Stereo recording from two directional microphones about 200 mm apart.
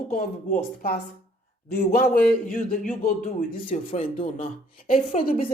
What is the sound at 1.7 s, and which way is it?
Speech, 45° left (ahead or behind).